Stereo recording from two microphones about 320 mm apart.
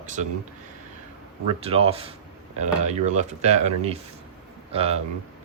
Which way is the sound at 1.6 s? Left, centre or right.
Centre.